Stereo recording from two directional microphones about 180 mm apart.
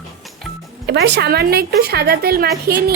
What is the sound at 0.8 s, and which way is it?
A woman's voice, 70° right (ahead or behind).